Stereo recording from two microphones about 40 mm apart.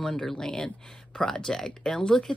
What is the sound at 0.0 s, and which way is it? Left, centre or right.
Speech, centre.